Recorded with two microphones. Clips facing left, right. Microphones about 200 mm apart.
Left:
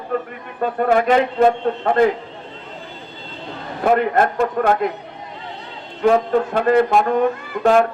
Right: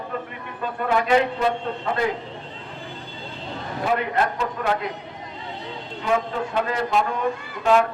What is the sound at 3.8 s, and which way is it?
A man's voice, 50° left (ahead or behind).